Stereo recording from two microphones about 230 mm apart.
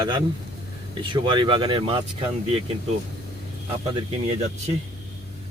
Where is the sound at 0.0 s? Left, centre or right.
Centre.